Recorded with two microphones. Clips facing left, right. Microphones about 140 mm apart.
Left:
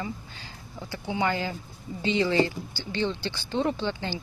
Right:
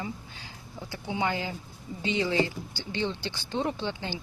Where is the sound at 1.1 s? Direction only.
15° right (ahead or behind).